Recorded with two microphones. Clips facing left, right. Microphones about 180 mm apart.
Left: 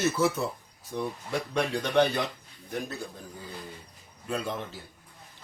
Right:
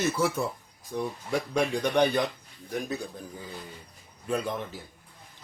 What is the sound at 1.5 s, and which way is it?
Speech, 10° right (ahead or behind).